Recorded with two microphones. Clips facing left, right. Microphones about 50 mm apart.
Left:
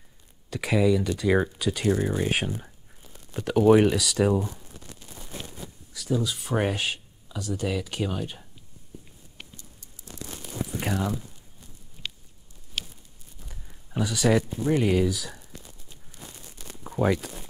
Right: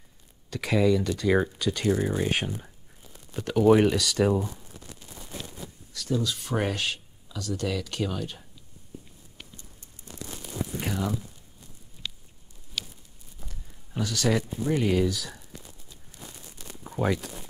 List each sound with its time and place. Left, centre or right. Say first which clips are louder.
0.5 s speech: left 1 dB; centre
5.9 s speech: left 1 dB; centre
10.8 s speech: left 2 dB; centre
13.5 s speech: left 5 dB; centre
16.9 s a sound: left 3 dB; centre